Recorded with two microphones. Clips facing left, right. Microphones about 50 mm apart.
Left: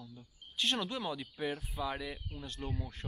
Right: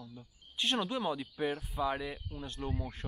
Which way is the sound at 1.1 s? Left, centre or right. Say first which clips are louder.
Right 3 dB; centre.